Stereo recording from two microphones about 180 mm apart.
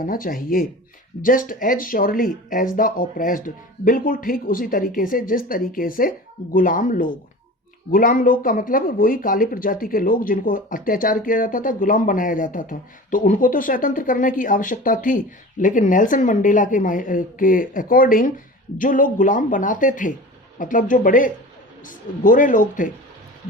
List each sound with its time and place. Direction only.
0.0 s speech: 50° left (ahead or behind)